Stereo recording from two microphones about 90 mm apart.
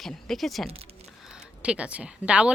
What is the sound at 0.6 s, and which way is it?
Speech, 90° right.